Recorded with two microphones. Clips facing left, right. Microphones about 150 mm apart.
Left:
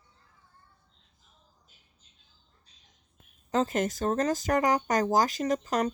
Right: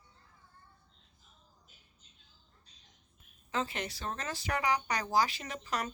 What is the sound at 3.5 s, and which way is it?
Speech, 40° left (ahead or behind).